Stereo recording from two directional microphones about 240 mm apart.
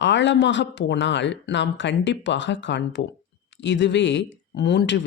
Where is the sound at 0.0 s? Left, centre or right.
Left.